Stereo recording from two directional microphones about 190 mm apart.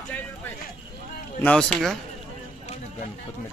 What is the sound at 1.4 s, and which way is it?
Speech, 5° left (ahead or behind).